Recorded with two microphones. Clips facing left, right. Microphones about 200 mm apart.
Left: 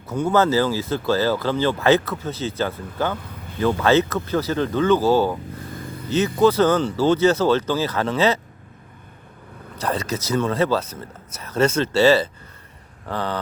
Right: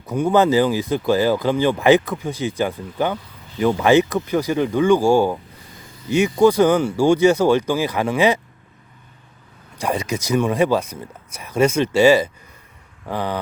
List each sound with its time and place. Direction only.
0.1 s speech: 15° right (ahead or behind)
3.2 s a sound: 55° left (ahead or behind)
3.6 s speech: 15° right (ahead or behind)
5.7 s vehicle: 55° left (ahead or behind)
6.1 s speech: 15° right (ahead or behind)
9.7 s speech: 15° right (ahead or behind)